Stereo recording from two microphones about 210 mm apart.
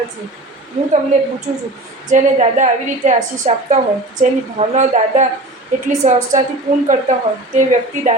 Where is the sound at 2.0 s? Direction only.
35° right (ahead or behind).